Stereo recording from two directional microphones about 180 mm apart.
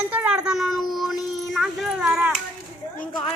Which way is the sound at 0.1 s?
5° right (ahead or behind).